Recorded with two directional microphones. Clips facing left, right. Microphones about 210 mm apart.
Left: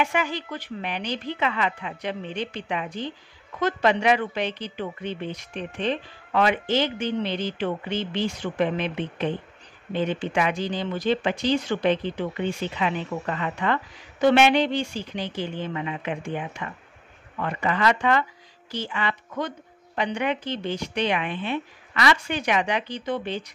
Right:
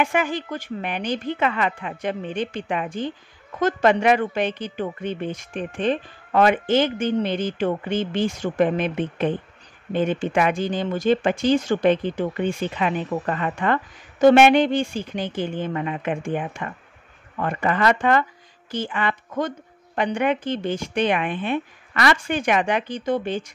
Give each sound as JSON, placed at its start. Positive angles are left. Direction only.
{"t": 0.0, "sound": "a woman's voice", "side_deg": -50}